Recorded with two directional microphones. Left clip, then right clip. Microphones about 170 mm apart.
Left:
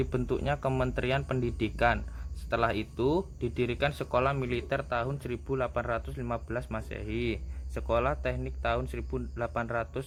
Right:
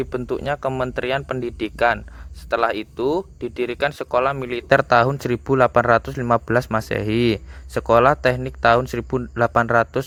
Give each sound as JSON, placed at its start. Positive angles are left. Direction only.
{"t": 0.0, "sound": "speech", "side_deg": -45}